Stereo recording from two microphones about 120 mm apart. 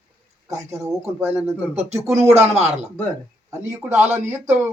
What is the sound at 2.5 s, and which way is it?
Speech, 65° right (ahead or behind).